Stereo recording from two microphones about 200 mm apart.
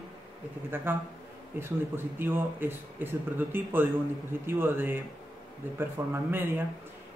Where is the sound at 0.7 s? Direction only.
10° right (ahead or behind).